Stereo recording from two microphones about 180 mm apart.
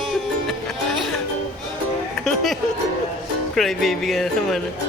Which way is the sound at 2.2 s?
Centre (ahead or behind).